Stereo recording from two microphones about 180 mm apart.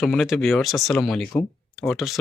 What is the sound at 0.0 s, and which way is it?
Speech, centre (ahead or behind).